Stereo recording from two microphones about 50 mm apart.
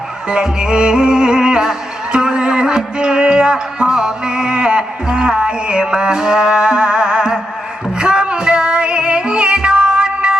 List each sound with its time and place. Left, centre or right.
0.3 s music: centre